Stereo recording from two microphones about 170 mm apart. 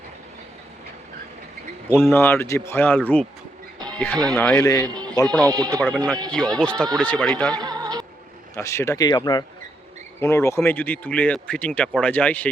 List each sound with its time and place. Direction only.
1.9 s speech: 15° left (ahead or behind)
4.9 s a sound: 25° right (ahead or behind)
5.2 s speech: 5° left (ahead or behind)
5.5 s speech: 20° right (ahead or behind)
6.3 s speech: 5° left (ahead or behind)
7.5 s music: 25° right (ahead or behind)
8.5 s speech: 15° left (ahead or behind)